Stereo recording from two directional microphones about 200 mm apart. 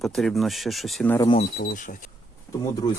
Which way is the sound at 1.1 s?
20° left (ahead or behind).